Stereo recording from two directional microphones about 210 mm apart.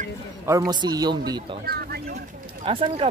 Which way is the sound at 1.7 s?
50° right (ahead or behind).